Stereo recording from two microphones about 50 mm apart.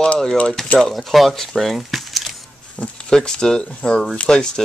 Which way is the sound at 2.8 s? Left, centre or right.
Left.